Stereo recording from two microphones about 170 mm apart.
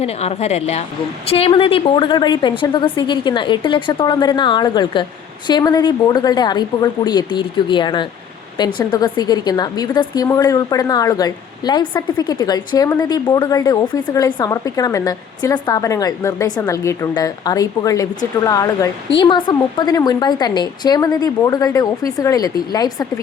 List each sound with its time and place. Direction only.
0.0 s a woman's voice: 40° left (ahead or behind); by 23.2 s 20° left (ahead or behind)